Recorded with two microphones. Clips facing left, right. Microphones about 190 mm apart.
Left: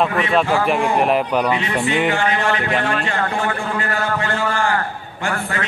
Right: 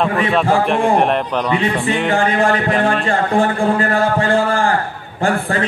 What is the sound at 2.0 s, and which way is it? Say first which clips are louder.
Speech: right 4 dB; 35° right (ahead or behind).